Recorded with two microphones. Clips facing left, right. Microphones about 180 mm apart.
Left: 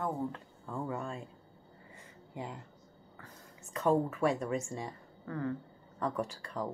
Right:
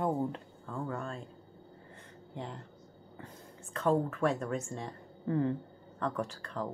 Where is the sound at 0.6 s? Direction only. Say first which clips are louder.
Left 1 dB; 10° left (ahead or behind).